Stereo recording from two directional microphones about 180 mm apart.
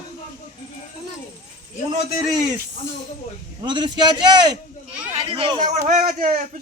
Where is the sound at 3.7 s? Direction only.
25° right (ahead or behind).